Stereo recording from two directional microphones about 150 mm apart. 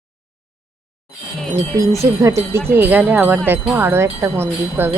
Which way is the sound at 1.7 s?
20° right (ahead or behind).